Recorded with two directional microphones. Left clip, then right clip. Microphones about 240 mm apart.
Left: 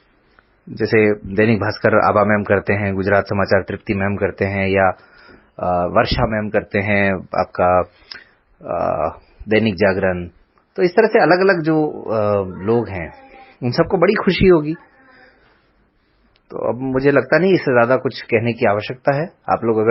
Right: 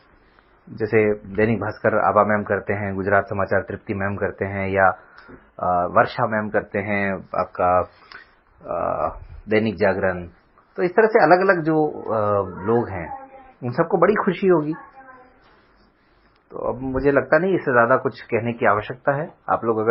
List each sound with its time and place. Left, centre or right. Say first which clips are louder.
0.8 s a man's voice: left 4 dB; left
16.5 s speech: left 5 dB; left